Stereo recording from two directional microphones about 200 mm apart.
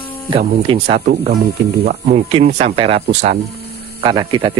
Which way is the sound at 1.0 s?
45° right (ahead or behind).